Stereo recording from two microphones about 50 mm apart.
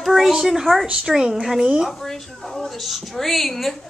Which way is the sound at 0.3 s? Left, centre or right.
Centre.